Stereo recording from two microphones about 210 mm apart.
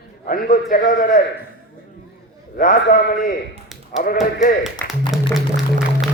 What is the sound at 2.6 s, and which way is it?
A man's voice, 40° left (ahead or behind).